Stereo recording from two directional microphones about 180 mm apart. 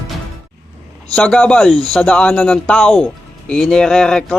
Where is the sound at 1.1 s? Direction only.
5° left (ahead or behind).